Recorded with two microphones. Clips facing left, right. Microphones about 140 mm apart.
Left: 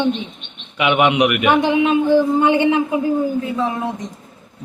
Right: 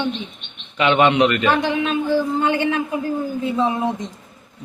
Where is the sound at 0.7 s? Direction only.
10° left (ahead or behind).